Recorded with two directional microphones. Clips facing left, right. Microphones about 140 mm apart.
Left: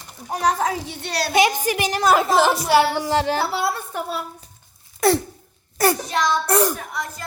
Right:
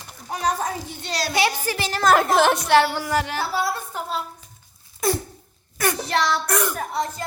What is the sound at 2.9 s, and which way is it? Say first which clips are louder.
Speech: left 4 dB; 25° left (ahead or behind).